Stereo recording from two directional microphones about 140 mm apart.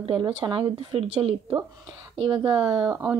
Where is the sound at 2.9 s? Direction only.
10° right (ahead or behind).